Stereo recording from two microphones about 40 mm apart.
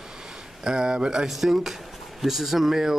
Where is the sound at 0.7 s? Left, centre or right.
Centre.